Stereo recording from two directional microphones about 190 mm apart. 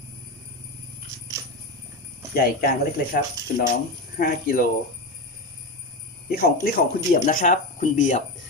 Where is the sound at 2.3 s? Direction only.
55° left (ahead or behind).